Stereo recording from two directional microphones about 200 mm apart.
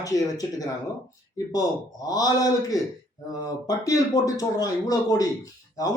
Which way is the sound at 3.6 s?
15° left (ahead or behind).